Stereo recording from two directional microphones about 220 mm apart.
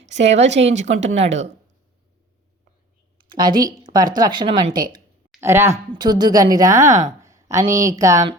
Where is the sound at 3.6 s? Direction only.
20° right (ahead or behind).